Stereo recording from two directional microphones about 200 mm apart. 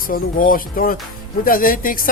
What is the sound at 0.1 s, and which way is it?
A woman's voice, 45° left (ahead or behind).